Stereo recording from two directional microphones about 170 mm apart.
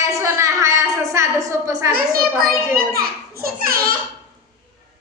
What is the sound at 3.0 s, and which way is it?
Speech, 60° right (ahead or behind).